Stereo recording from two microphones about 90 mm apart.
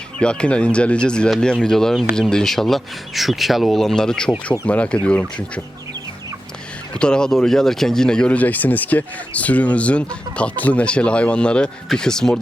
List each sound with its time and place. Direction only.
0.2 s speech: 10° left (ahead or behind)
6.9 s speech: 10° left (ahead or behind)